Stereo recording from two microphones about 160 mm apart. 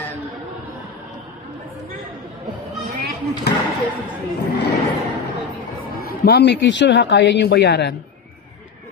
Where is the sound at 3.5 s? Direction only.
90° left.